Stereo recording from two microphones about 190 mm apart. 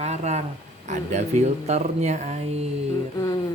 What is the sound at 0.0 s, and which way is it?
Speech, 35° right (ahead or behind).